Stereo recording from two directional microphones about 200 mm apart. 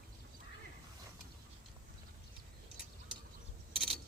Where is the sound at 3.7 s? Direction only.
Centre (ahead or behind).